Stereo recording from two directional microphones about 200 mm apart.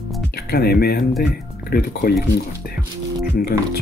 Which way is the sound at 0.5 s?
50° left (ahead or behind).